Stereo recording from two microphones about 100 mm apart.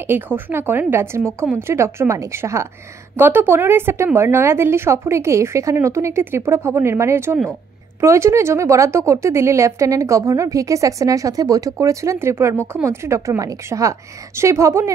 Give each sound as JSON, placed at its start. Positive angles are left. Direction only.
{"t": 0.0, "sound": "speech", "side_deg": -20}